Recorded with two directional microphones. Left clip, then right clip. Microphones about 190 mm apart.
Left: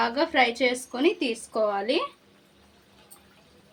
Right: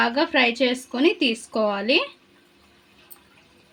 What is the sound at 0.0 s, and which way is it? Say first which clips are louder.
A woman's voice: right 3 dB; 50° right (ahead or behind).